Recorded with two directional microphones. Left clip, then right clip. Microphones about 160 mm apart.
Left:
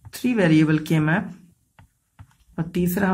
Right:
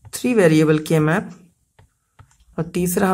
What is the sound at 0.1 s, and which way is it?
A woman's voice, 35° right (ahead or behind).